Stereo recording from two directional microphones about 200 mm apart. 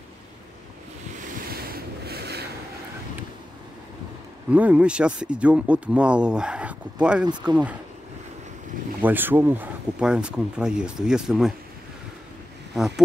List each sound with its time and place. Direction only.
1.5 s boat: 50° right (ahead or behind)
4.5 s speech: 5° right (ahead or behind)
9.0 s speech: 10° right (ahead or behind)
12.7 s a sound: centre (ahead or behind)